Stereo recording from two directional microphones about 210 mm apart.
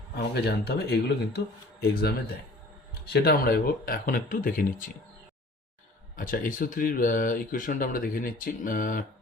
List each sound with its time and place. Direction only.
0.2 s speech: 50° left (ahead or behind)
6.1 s speech: 40° left (ahead or behind)